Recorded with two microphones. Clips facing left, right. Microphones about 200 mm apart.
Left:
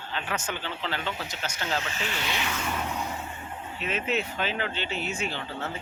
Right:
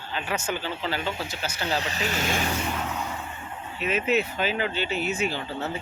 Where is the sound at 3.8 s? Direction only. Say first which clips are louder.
Right 5 dB; 5° right (ahead or behind).